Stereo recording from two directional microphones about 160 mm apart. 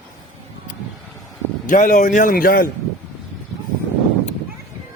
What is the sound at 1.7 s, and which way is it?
A man's voice, 55° left (ahead or behind).